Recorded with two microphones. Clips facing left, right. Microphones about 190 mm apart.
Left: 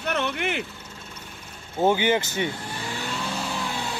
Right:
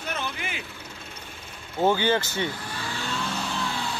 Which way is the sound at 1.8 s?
15° left (ahead or behind).